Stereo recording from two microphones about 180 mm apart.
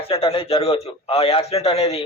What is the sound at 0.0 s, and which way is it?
A man's voice, 30° left (ahead or behind).